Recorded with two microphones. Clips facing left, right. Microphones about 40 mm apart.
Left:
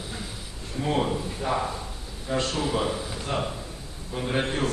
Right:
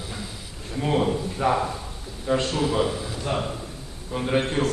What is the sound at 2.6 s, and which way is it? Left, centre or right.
Speech, centre.